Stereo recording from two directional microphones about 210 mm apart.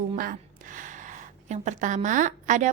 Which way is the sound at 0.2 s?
40° right (ahead or behind).